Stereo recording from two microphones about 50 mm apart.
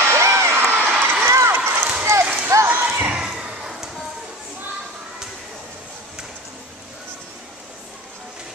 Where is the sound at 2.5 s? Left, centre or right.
Right.